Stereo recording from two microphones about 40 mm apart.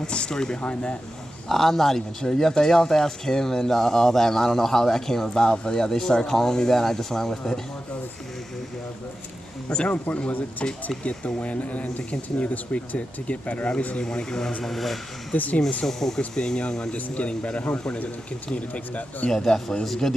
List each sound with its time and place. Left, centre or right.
0.0 s speech: left
1.5 s speech: centre
9.8 s speech: left
14.0 s speech: centre
14.6 s speech: centre
15.3 s speech: left
15.8 s speech: centre
16.3 s speech: left
16.9 s speech: left
19.3 s speech: centre